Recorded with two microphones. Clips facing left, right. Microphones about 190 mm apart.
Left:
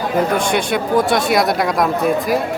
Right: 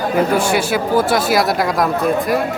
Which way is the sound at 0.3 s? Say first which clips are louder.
Right 1 dB; 5° right (ahead or behind).